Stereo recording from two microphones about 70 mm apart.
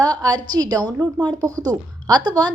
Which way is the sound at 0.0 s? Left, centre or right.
Right.